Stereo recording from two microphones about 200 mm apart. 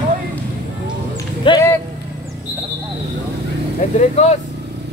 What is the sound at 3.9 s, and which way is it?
Speech, 35° left (ahead or behind).